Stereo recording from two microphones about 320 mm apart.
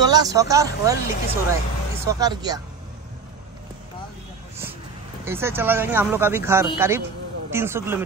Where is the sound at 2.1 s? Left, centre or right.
Centre.